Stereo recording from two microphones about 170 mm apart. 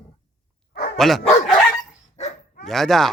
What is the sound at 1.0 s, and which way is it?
Speech, centre (ahead or behind).